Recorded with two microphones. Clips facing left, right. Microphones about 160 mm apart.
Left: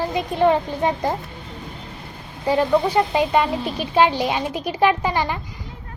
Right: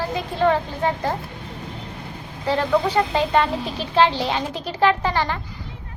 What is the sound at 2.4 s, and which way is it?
A child's voice, 10° left (ahead or behind).